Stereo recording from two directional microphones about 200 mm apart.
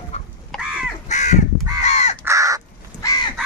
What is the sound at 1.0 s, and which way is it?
Crow, 35° left (ahead or behind).